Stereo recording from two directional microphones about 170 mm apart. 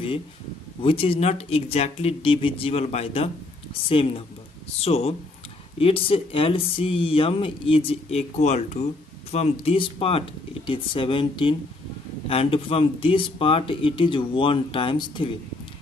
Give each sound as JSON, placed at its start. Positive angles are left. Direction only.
{"t": 0.8, "sound": "speech", "side_deg": 35}